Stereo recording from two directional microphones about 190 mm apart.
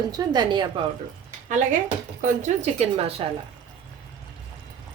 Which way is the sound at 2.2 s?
35° right (ahead or behind).